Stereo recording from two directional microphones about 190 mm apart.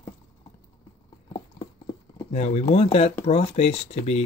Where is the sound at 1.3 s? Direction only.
25° left (ahead or behind).